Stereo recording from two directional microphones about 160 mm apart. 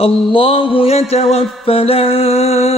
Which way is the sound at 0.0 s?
35° left (ahead or behind).